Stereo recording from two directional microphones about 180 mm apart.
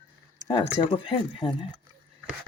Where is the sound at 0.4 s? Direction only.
30° left (ahead or behind).